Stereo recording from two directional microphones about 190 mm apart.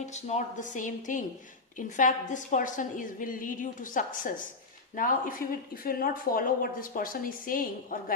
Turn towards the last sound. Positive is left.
turn(degrees=45)  # may be behind; listen again after turning